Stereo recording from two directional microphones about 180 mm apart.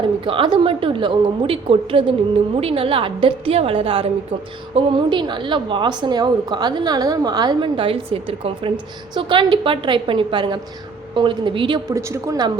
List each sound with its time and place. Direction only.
0.3 s a woman's voice: 25° right (ahead or behind)